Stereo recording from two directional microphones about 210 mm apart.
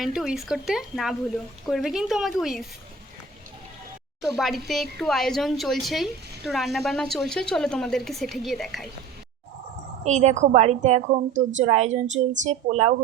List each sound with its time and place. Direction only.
0.0 s speech: centre (ahead or behind)
4.2 s speech: centre (ahead or behind)
10.0 s a woman's voice: 35° right (ahead or behind)